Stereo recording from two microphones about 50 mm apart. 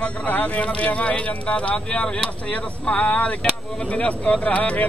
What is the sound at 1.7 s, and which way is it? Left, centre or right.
Speech, centre.